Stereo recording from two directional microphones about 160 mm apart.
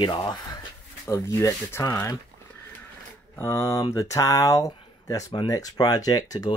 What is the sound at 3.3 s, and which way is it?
Speech, 15° left (ahead or behind).